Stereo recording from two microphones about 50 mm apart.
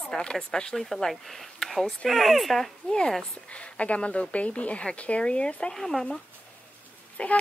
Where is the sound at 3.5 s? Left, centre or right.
Left.